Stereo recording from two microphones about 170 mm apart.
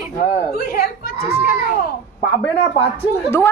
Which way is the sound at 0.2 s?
60° left (ahead or behind).